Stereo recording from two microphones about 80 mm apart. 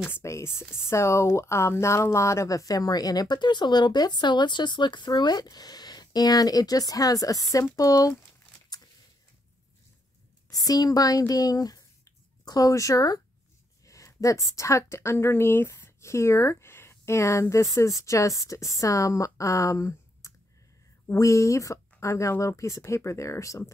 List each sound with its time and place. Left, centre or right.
0.1 s speech: left
10.5 s a woman's voice: left